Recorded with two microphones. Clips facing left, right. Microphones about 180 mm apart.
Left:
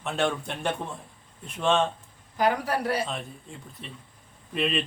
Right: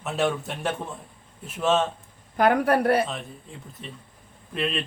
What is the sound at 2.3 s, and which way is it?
Speech, 55° right (ahead or behind).